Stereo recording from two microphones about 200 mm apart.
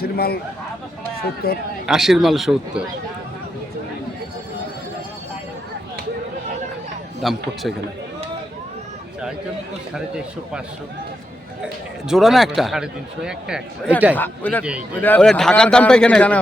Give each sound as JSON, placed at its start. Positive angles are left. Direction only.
{"t": 0.0, "sound": "speech", "side_deg": 50}
{"t": 1.4, "sound": "speech", "side_deg": 50}
{"t": 1.9, "sound": "speech", "side_deg": 0}
{"t": 7.2, "sound": "speech", "side_deg": 0}
{"t": 9.9, "sound": "speech", "side_deg": -5}
{"t": 11.6, "sound": "speech", "side_deg": 0}
{"t": 14.2, "sound": "a man's voice", "side_deg": 10}